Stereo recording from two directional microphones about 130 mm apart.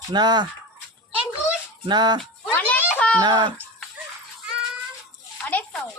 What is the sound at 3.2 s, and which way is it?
Speech, 35° right (ahead or behind).